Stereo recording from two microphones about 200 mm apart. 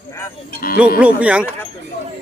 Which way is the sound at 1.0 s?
5° right (ahead or behind).